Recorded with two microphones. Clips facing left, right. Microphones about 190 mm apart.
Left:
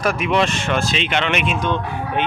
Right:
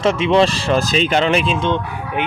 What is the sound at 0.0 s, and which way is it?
Speech, 25° right (ahead or behind).